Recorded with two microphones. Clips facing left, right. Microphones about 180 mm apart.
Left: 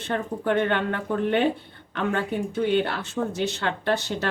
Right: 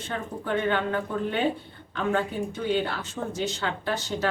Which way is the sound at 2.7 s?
65° left (ahead or behind).